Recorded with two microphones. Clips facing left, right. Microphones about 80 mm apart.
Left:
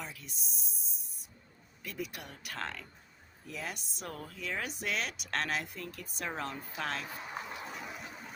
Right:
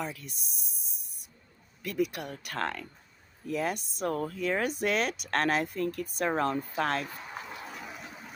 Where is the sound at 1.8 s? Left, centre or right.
Right.